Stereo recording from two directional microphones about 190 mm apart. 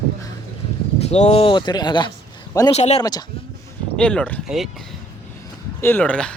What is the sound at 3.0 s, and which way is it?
Speech, 20° left (ahead or behind).